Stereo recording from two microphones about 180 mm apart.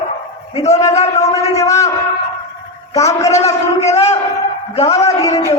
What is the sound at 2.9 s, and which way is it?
Speech, 15° left (ahead or behind).